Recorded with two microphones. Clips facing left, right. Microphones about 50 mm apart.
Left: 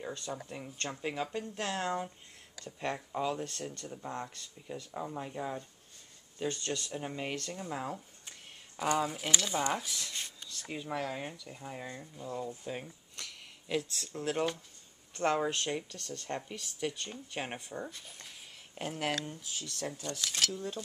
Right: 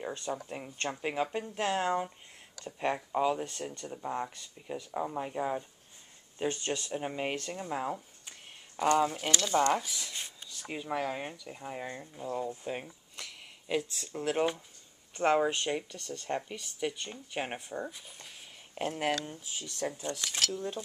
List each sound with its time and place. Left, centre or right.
0.0 s speech: right
8.9 s speech: centre
19.6 s speech: right
20.2 s speech: centre